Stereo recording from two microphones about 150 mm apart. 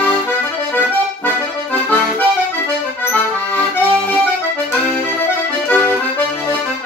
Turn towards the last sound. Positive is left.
turn(degrees=15)  # may be behind; listen again after turning